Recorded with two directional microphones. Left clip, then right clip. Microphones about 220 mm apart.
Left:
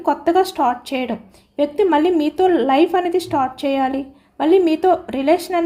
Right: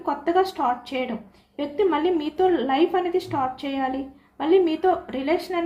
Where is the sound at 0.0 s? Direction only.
50° left (ahead or behind).